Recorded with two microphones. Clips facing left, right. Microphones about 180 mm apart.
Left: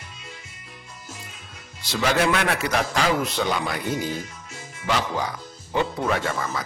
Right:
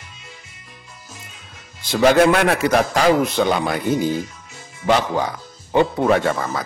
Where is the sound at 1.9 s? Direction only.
50° right (ahead or behind).